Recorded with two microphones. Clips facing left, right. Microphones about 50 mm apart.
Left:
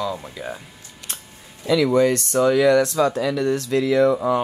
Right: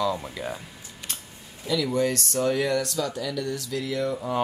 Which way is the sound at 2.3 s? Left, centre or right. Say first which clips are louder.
Left 9 dB; left.